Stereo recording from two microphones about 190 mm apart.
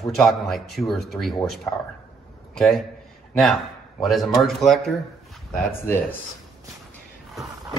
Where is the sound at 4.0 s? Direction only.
Centre (ahead or behind).